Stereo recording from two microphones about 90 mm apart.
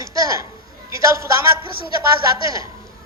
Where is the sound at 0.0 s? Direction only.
35° right (ahead or behind).